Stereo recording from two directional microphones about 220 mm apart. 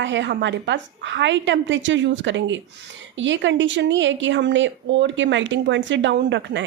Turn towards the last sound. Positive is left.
turn(degrees=-55)  # may be behind; listen again after turning